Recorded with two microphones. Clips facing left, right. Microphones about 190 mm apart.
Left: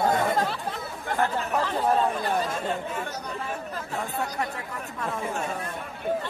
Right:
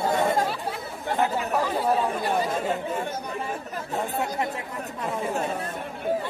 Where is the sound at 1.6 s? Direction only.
10° right (ahead or behind).